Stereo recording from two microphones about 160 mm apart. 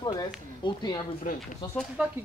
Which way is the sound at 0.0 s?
25° left (ahead or behind).